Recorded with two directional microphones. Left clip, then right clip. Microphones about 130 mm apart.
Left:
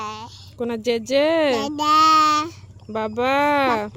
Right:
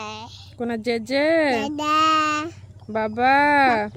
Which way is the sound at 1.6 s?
30° right (ahead or behind).